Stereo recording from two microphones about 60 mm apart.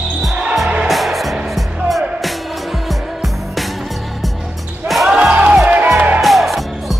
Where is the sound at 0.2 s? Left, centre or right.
Centre.